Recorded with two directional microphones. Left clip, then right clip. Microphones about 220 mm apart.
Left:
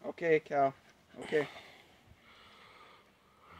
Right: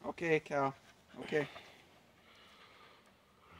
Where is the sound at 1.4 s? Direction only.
Centre (ahead or behind).